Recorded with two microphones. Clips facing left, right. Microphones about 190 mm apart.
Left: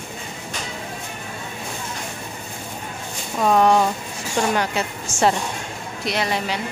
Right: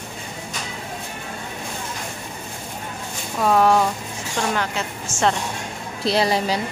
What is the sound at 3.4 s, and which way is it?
Speech, centre (ahead or behind).